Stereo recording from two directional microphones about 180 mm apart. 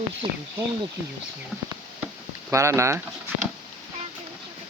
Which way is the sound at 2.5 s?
15° right (ahead or behind).